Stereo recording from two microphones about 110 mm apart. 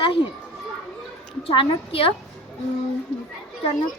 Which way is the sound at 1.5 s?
60° left (ahead or behind).